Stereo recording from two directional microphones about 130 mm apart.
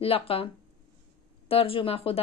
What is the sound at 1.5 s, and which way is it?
Speech, 45° left (ahead or behind).